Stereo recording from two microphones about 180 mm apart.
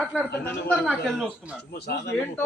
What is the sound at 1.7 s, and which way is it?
Speech, 60° left (ahead or behind).